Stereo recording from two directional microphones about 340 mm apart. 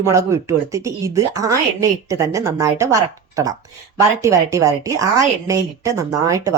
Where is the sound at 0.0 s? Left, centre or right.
Centre.